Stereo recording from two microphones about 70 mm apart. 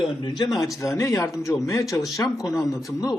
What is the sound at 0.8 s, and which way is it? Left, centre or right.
Speech, left.